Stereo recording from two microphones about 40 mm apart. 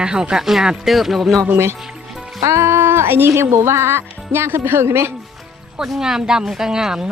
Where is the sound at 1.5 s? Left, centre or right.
Right.